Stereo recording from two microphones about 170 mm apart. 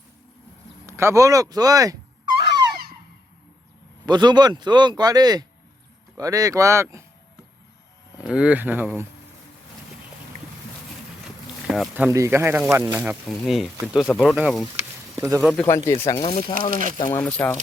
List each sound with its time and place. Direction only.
0.9 s speech: 15° right (ahead or behind)
4.0 s speech: 25° right (ahead or behind)
8.2 s speech: 5° right (ahead or behind)
11.7 s speech: 5° right (ahead or behind)
12.1 s speech: 15° right (ahead or behind)
15.1 s speech: 15° right (ahead or behind)
15.6 s speech: 20° left (ahead or behind)
16.1 s speech: 30° left (ahead or behind)
17.1 s speech: 10° left (ahead or behind)